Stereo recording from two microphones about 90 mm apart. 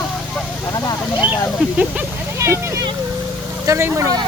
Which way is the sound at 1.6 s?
15° right (ahead or behind).